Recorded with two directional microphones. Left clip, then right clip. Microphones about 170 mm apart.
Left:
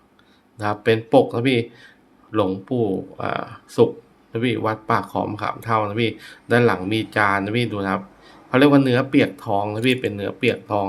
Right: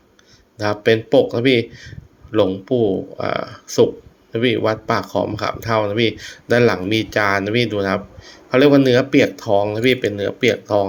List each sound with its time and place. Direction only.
0.5 s speech: 15° right (ahead or behind)